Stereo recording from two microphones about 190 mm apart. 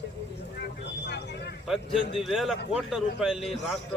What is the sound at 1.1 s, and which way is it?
Speech, 60° left (ahead or behind).